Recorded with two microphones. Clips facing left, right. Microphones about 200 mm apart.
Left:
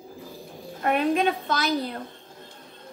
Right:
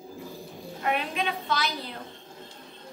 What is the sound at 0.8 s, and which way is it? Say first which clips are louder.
A woman's voice: left 7 dB; 45° left (ahead or behind).